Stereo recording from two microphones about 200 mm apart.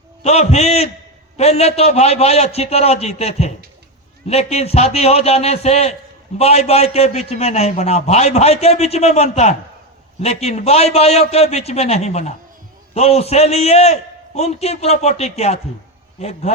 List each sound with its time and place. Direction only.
0.2 s a man's voice: 30° left (ahead or behind)